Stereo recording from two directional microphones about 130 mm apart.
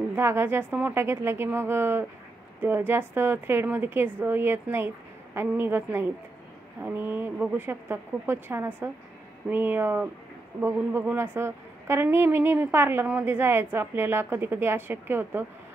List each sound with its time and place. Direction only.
0.1 s a woman's voice: 20° right (ahead or behind)